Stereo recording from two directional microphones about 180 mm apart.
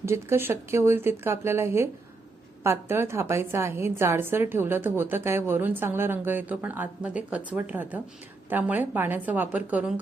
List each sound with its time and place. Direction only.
0.0 s a woman's voice: 15° right (ahead or behind)